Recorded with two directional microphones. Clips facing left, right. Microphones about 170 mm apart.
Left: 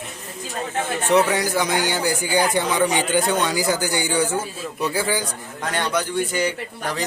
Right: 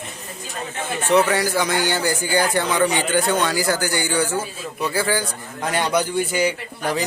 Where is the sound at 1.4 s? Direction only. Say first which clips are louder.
Right 1 dB; 15° left (ahead or behind).